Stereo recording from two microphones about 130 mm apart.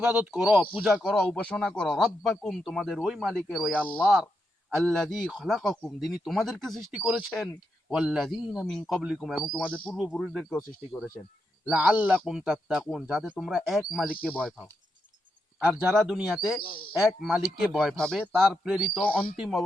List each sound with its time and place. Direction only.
0.0 s speech: 5° right (ahead or behind)
11.6 s speech: 5° right (ahead or behind)
16.0 s speech: centre (ahead or behind)